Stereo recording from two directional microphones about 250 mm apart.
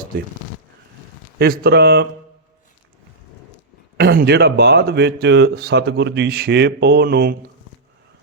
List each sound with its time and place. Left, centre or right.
1.4 s speech: right
3.9 s speech: right